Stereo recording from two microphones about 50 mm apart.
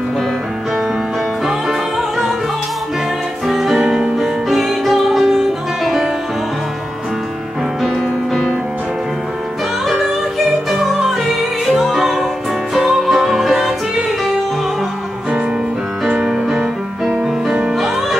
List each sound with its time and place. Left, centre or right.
1.4 s music: centre
3.4 s music: centre
7.8 s music: centre
10.7 s music: centre
16.1 s music: centre